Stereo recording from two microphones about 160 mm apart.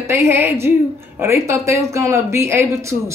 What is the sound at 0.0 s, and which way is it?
Speech, 15° right (ahead or behind).